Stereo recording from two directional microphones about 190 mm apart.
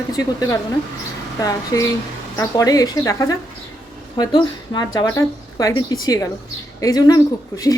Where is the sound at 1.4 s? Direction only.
15° left (ahead or behind).